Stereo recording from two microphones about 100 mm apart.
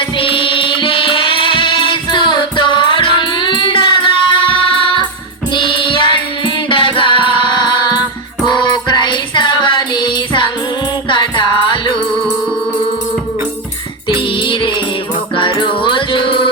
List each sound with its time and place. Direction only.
0.0 s music: 60° left (ahead or behind)
14.2 s music: 55° left (ahead or behind)